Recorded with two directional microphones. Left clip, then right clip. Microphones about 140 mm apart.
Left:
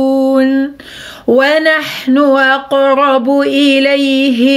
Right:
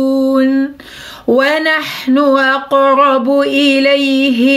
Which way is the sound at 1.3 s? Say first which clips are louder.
Left 2 dB; 25° left (ahead or behind).